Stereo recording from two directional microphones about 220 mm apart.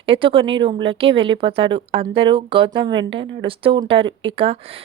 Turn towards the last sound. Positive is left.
turn(degrees=-25)  # may be behind; listen again after turning